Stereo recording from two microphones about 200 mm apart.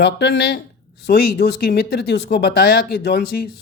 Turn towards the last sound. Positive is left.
turn(degrees=50)  # may be behind; listen again after turning